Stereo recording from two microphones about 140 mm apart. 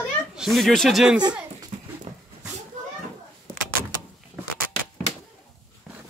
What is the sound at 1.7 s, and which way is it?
Dog, 55° right (ahead or behind).